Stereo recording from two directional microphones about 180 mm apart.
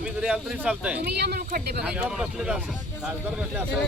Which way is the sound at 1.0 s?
65° right (ahead or behind).